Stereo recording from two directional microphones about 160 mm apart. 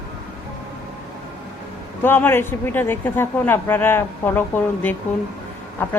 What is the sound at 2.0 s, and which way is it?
A woman's voice, 15° left (ahead or behind).